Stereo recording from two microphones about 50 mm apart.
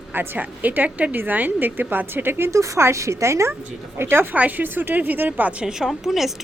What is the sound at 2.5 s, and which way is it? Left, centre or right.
Speech, right.